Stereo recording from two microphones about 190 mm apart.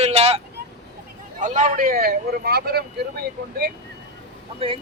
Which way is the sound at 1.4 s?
40° right (ahead or behind).